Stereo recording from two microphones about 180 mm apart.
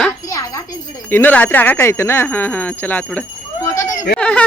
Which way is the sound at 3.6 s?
15° left (ahead or behind).